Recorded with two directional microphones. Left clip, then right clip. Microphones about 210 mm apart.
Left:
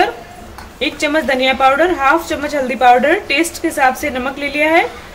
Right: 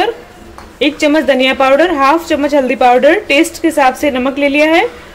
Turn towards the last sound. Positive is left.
turn(degrees=-35)  # may be behind; listen again after turning